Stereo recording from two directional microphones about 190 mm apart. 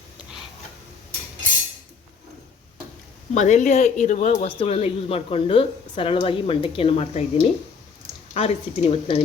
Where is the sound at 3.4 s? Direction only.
40° left (ahead or behind).